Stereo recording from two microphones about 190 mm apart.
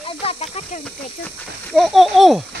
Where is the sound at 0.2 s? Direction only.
30° left (ahead or behind).